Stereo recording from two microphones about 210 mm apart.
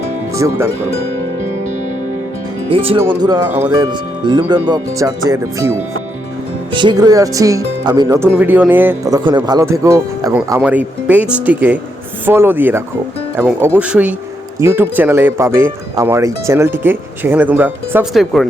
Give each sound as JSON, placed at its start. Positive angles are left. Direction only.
{"t": 0.3, "sound": "speech", "side_deg": -15}
{"t": 2.6, "sound": "speech", "side_deg": -25}